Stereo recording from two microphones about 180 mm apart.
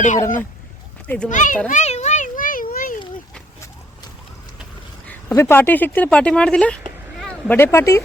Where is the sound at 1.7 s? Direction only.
40° left (ahead or behind).